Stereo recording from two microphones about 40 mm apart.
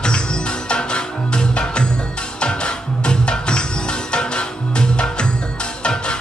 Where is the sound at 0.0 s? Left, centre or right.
Left.